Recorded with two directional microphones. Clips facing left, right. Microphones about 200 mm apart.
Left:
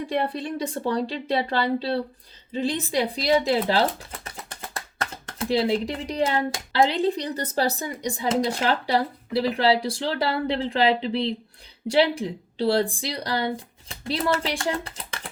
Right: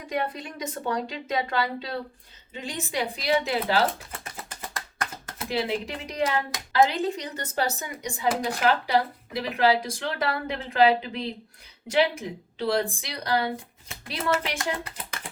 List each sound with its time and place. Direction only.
0.1 s speech: 35° left (ahead or behind)
5.5 s speech: 35° left (ahead or behind)